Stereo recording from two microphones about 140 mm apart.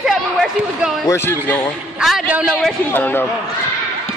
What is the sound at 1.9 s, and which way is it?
Speech, centre (ahead or behind).